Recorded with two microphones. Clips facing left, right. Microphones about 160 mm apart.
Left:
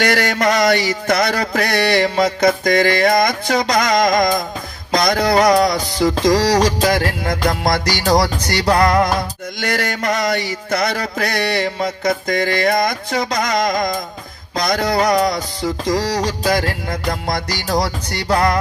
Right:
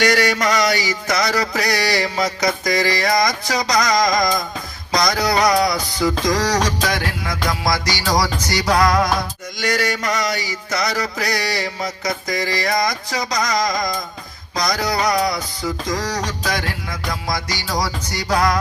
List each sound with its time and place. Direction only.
0.0 s mantra: 55° left (ahead or behind)
4.9 s a sound: 55° left (ahead or behind)
6.0 s music: 25° left (ahead or behind)
7.3 s mantra: 60° left (ahead or behind)
14.5 s a sound: 55° left (ahead or behind)
15.6 s music: 30° left (ahead or behind)
16.9 s mantra: 60° left (ahead or behind)